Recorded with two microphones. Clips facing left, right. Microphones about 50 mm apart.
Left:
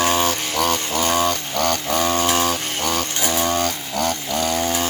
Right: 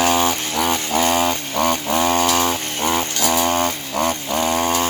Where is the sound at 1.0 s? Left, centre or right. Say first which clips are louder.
Even; right.